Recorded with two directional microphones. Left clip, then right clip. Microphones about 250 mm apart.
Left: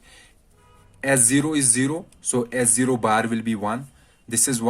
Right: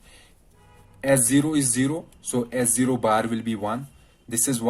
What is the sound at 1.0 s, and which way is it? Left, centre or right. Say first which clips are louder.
Speech: even; left.